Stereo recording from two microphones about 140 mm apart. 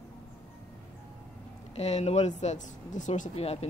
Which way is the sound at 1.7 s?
50° left (ahead or behind).